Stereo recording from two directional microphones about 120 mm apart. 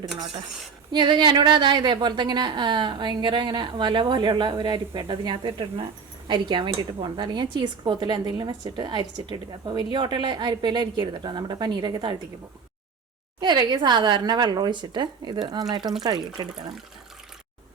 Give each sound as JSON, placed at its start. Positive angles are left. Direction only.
{"t": 0.9, "sound": "a woman's voice", "side_deg": -40}
{"t": 13.4, "sound": "a woman's voice", "side_deg": -40}